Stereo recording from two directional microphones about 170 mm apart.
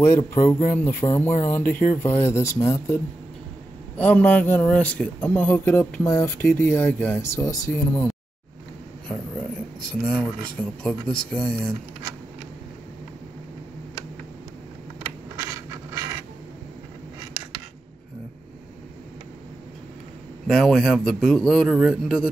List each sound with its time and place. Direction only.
0.0 s speech: 15° left (ahead or behind)
10.0 s speech: 10° left (ahead or behind)
15.5 s a sound: 20° right (ahead or behind)
20.4 s speech: centre (ahead or behind)